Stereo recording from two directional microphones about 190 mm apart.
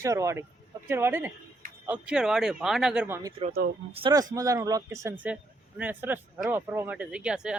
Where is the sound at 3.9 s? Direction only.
25° right (ahead or behind); by 7.6 s 5° right (ahead or behind).